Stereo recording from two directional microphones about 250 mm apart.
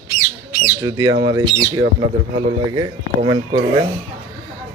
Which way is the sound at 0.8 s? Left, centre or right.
Centre.